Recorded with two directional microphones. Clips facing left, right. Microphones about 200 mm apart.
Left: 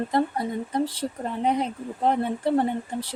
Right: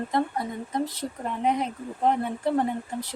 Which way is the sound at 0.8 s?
30° left (ahead or behind).